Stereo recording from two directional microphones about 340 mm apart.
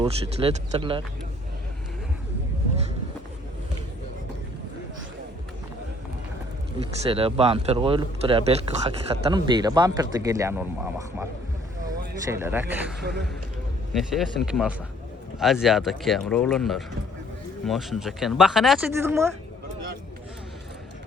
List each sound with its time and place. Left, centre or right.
0.0 s speech: centre
7.0 s speech: centre